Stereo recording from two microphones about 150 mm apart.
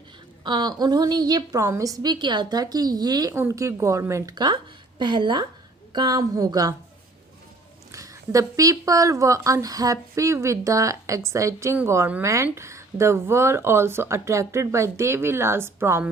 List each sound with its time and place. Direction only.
0.4 s a woman's voice: 30° right (ahead or behind)
7.9 s a woman's voice: 20° right (ahead or behind)